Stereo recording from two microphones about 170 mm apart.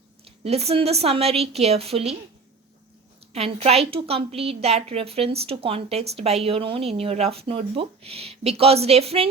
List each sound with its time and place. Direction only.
0.3 s a woman's voice: 35° right (ahead or behind)
3.3 s a woman's voice: 40° right (ahead or behind)